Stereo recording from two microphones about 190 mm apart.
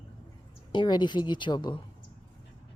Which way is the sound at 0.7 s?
25° left (ahead or behind).